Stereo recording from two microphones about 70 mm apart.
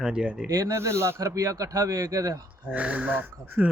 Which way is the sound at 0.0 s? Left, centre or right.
Centre.